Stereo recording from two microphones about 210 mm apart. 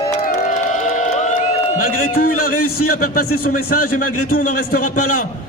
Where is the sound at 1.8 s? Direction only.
45° left (ahead or behind).